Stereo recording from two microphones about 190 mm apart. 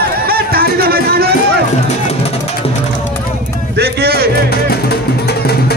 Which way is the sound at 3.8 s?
55° right (ahead or behind).